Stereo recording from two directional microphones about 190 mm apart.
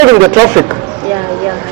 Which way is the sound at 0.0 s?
20° right (ahead or behind).